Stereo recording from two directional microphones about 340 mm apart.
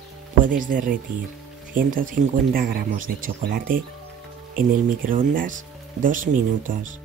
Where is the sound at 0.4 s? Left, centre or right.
Right.